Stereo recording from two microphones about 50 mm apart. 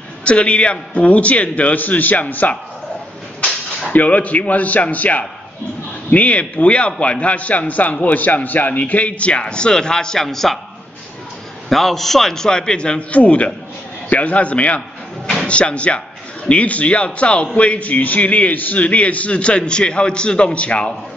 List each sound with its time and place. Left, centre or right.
0.2 s a man's voice: left
3.9 s a man's voice: left; by 10.6 s centre
11.7 s a man's voice: centre; by 13.2 s left
13.2 s a man's voice: left